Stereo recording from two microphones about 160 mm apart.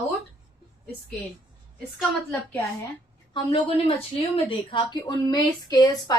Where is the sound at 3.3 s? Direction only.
35° left (ahead or behind).